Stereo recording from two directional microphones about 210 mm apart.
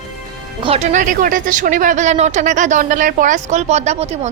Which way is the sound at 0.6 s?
30° right (ahead or behind).